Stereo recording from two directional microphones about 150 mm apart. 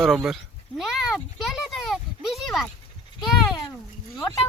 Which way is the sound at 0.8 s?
5° right (ahead or behind).